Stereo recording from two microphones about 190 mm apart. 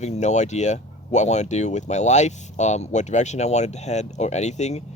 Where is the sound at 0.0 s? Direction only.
35° left (ahead or behind).